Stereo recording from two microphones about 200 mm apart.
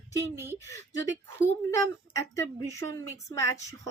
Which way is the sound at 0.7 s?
60° right (ahead or behind).